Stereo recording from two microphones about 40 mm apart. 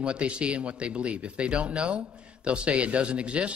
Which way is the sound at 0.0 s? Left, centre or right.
Right.